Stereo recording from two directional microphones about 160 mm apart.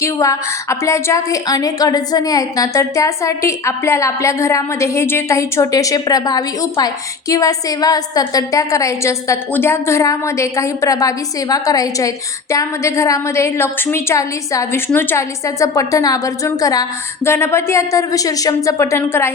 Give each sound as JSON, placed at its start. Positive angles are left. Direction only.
{"t": 0.0, "sound": "a woman's voice", "side_deg": 20}